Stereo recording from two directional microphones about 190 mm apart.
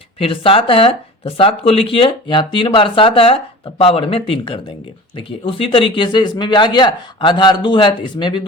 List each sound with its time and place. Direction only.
0.2 s speech: 30° left (ahead or behind)